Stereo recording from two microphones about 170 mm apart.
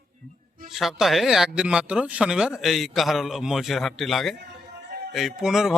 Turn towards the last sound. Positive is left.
turn(degrees=0)  # may be behind; listen again after turning